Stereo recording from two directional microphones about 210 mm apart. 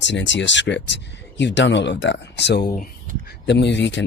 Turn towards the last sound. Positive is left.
turn(degrees=55)  # may be behind; listen again after turning